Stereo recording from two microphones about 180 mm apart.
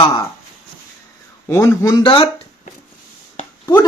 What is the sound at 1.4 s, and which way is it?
Speech, 15° left (ahead or behind).